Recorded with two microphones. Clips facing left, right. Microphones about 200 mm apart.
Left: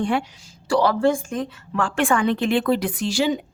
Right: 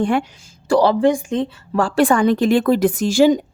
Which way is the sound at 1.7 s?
40° right (ahead or behind).